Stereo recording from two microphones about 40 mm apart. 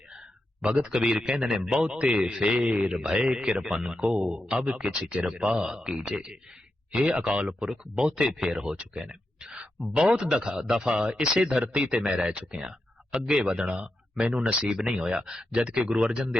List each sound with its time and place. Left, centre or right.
0.6 s speech: right
10.8 s speech: right
14.6 s speech: centre